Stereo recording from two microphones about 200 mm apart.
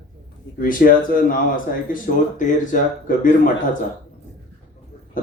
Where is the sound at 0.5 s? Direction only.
45° left (ahead or behind).